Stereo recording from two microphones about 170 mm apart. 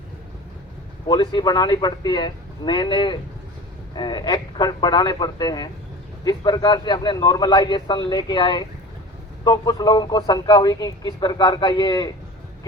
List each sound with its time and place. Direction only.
1.0 s a man's voice: 25° left (ahead or behind)